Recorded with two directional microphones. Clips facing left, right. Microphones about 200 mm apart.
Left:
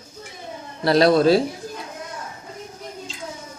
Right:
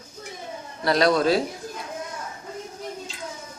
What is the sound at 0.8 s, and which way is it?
Speech, 30° left (ahead or behind).